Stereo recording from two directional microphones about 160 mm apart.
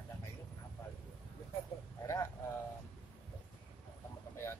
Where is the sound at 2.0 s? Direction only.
20° left (ahead or behind).